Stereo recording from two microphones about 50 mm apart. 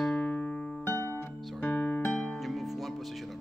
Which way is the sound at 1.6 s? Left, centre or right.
Left.